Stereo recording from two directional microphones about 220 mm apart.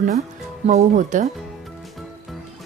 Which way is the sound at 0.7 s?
30° right (ahead or behind).